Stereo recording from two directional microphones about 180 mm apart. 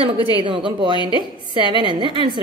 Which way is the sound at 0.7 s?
25° right (ahead or behind).